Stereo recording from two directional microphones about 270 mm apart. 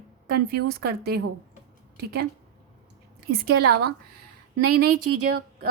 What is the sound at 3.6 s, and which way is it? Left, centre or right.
Speech, right.